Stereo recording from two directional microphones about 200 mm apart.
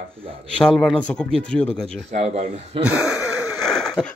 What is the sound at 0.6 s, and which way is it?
Speech, 5° left (ahead or behind).